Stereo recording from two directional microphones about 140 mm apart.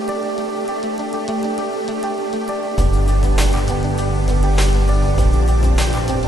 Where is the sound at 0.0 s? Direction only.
Centre (ahead or behind).